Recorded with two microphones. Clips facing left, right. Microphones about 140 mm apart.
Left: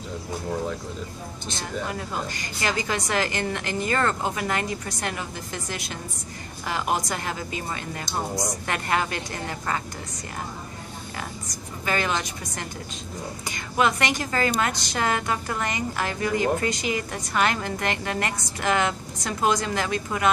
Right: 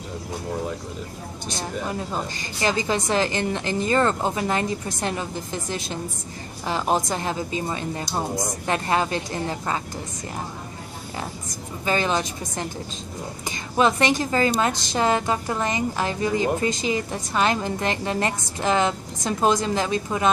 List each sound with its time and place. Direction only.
1.9 s a woman's voice: 25° right (ahead or behind)
11.8 s a woman's voice: 25° right (ahead or behind)